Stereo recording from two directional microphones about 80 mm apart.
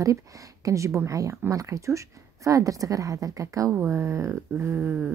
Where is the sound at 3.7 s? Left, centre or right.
Right.